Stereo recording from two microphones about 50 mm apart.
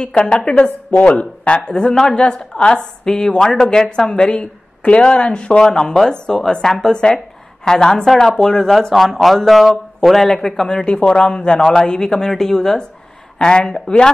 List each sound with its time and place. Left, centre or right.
0.0 s a woman's voice: left
8.9 s a woman's voice: centre